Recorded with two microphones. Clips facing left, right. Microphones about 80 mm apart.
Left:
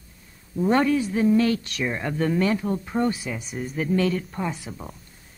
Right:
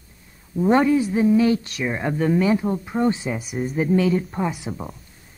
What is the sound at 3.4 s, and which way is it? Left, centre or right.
Speech, centre.